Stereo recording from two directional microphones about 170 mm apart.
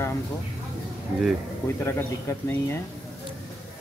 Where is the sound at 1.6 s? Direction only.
15° left (ahead or behind).